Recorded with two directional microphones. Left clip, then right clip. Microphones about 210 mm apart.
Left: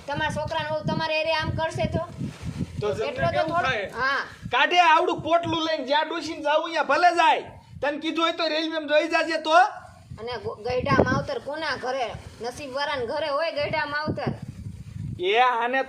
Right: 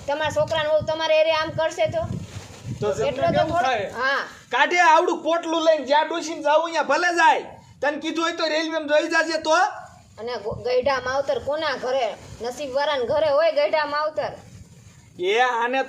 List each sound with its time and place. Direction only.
0.1 s speech: 20° left (ahead or behind)
3.0 s speech: 20° left (ahead or behind)
4.5 s speech: 30° right (ahead or behind)
10.2 s speech: 20° left (ahead or behind)
15.2 s speech: 30° right (ahead or behind)